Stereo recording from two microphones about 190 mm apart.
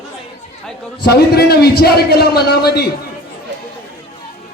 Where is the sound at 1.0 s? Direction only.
55° left (ahead or behind).